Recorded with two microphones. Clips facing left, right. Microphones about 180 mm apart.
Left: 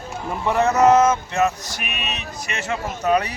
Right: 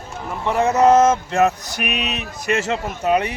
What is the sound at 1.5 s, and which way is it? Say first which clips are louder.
Speech: right 5 dB; 65° right (ahead or behind).